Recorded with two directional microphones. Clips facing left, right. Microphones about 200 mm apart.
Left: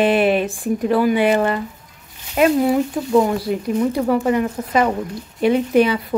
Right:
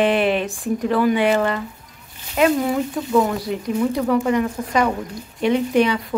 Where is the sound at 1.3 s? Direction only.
30° left (ahead or behind).